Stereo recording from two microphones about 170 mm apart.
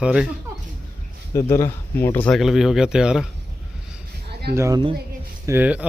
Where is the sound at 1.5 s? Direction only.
15° left (ahead or behind).